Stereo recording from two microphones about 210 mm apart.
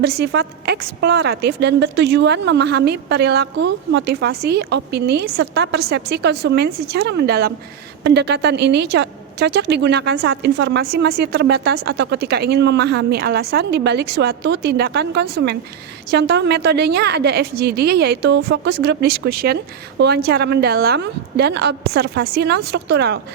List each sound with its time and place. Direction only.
0.0 s a woman's voice: 50° right (ahead or behind)